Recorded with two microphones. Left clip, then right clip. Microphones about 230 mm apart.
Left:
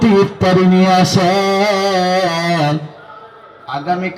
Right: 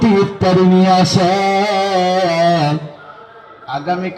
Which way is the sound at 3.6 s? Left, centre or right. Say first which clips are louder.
Left 1 dB; left.